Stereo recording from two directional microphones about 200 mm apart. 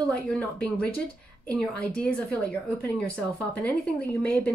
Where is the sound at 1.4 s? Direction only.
5° left (ahead or behind).